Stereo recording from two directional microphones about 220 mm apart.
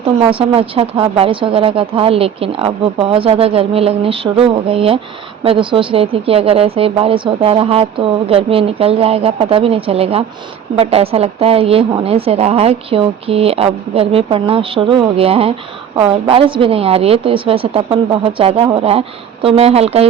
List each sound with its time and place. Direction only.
0.3 s speech: 25° right (ahead or behind)